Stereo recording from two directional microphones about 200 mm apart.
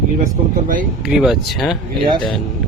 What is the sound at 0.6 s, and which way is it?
Speech, 45° right (ahead or behind).